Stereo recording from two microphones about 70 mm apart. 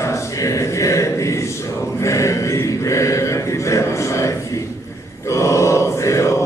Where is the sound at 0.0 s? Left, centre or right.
Left.